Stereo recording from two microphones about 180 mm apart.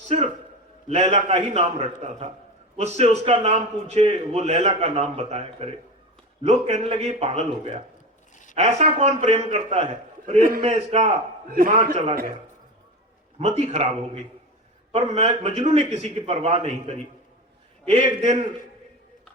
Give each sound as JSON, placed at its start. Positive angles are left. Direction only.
{"t": 0.1, "sound": "a man's voice", "side_deg": -35}
{"t": 11.4, "sound": "a man's voice", "side_deg": -50}
{"t": 13.4, "sound": "a man's voice", "side_deg": -40}
{"t": 14.9, "sound": "a man's voice", "side_deg": -35}
{"t": 18.2, "sound": "a man's voice", "side_deg": -40}